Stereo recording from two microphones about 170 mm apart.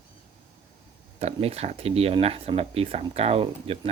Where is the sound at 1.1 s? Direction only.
35° right (ahead or behind).